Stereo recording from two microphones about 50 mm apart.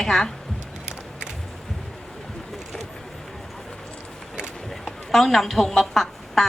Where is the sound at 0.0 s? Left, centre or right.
Centre.